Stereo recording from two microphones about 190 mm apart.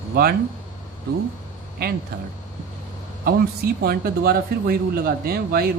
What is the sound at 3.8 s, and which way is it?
Speech, 55° right (ahead or behind).